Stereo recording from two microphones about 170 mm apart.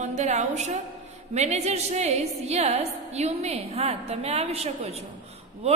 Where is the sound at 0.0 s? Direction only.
40° right (ahead or behind).